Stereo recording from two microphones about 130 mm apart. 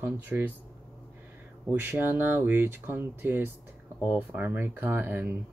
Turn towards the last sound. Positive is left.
turn(degrees=-15)  # may be behind; listen again after turning